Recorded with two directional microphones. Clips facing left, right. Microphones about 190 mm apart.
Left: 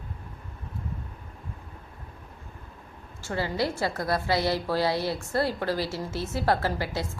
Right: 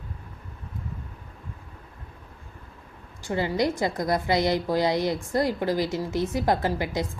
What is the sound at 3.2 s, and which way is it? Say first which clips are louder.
A woman's voice: right 3 dB; 20° right (ahead or behind).